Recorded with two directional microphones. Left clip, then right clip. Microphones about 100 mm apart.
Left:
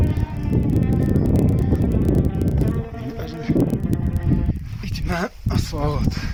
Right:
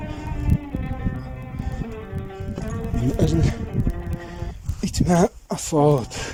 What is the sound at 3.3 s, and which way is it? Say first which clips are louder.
Music: right 3 dB; 50° right (ahead or behind).